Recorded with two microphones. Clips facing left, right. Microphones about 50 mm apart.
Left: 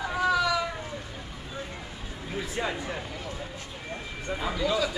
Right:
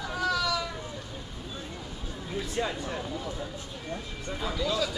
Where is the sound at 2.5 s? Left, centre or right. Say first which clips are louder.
Even; centre.